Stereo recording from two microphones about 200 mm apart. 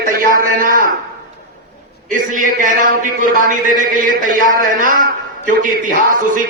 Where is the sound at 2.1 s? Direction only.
40° right (ahead or behind).